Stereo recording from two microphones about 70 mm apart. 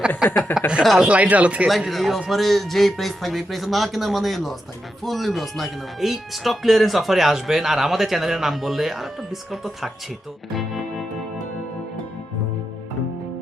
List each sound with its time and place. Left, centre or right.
0.3 s a sound: left
0.8 s speech: centre
1.0 s speech: centre
1.6 s speech: centre